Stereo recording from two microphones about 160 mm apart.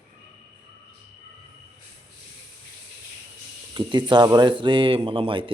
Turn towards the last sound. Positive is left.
turn(degrees=-35)  # may be behind; listen again after turning